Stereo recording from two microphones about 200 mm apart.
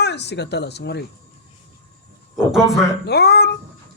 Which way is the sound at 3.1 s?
55° left (ahead or behind).